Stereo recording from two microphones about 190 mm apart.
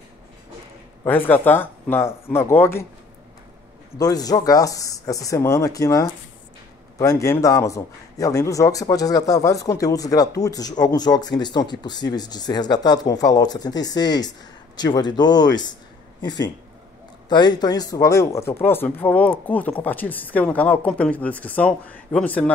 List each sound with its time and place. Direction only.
1.0 s a woman's voice: 10° left (ahead or behind)
4.0 s a woman's voice: 20° left (ahead or behind)
17.3 s a woman's voice: 20° left (ahead or behind); by 22.5 s 5° left (ahead or behind)